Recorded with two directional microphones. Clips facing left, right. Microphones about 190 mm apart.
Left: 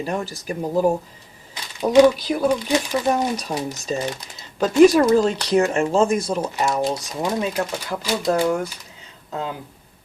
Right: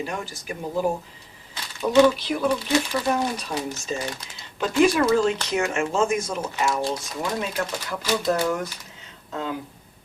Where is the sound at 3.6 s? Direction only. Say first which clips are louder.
Left 4 dB; 40° left (ahead or behind).